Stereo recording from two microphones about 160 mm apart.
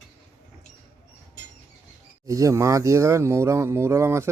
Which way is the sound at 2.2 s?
20° right (ahead or behind).